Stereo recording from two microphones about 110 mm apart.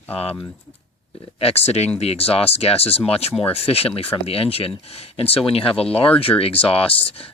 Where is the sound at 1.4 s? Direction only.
65° left (ahead or behind).